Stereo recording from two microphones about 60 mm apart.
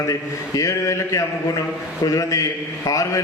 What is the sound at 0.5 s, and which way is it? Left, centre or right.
A man's voice, left.